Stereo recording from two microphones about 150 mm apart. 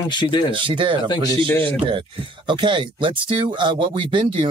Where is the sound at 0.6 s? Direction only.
35° right (ahead or behind).